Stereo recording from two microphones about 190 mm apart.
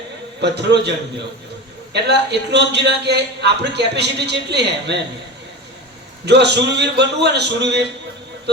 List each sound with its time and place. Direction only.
0.4 s a man's voice: 65° right (ahead or behind)
6.2 s a man's voice: 65° right (ahead or behind)